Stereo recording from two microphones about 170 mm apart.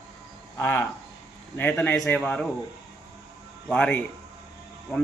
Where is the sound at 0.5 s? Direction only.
15° left (ahead or behind).